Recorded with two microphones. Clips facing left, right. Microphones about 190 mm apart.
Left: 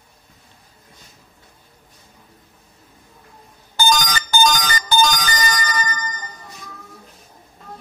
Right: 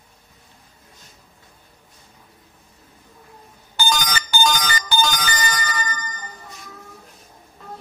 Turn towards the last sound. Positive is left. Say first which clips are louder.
# left 3 dB
turn(degrees=40)  # may be behind; listen again after turning